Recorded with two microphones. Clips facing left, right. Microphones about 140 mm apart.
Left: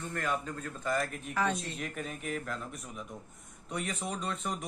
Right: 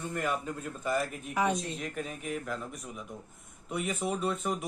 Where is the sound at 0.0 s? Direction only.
10° right (ahead or behind).